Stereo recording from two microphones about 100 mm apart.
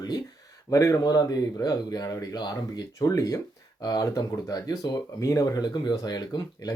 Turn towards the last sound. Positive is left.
turn(degrees=40)  # may be behind; listen again after turning